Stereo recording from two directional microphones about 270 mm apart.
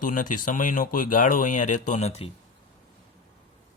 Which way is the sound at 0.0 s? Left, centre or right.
Left.